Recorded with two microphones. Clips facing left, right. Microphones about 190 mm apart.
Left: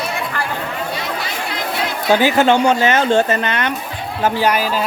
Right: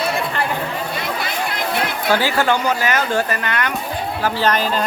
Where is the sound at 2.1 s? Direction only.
20° left (ahead or behind).